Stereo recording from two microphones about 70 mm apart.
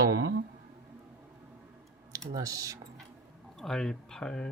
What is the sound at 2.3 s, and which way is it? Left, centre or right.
Speech, right.